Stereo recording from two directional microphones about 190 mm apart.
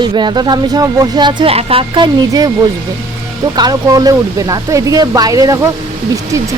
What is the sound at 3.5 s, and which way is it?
Speech, 20° right (ahead or behind).